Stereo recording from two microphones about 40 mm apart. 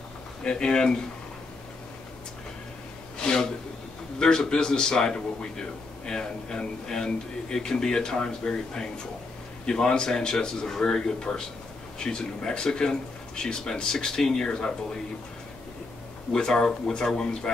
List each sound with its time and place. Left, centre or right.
0.4 s speech: left
3.2 s a sound: left
4.2 s a man's voice: centre
16.3 s a man's voice: centre